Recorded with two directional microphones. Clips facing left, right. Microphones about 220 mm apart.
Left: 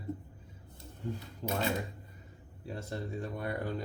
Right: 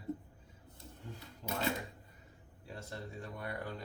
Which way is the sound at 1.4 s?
30° left (ahead or behind).